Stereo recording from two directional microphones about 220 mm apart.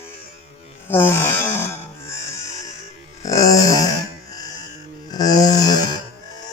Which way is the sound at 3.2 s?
15° left (ahead or behind).